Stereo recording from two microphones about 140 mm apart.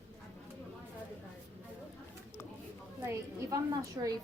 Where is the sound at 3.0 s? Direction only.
20° right (ahead or behind).